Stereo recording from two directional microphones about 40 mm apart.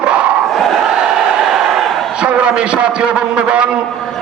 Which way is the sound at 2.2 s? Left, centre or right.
Right.